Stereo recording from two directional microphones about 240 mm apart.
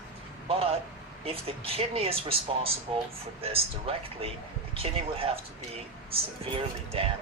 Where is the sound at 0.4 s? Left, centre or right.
Right.